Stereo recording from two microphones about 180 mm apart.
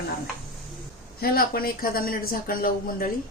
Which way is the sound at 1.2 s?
55° left (ahead or behind).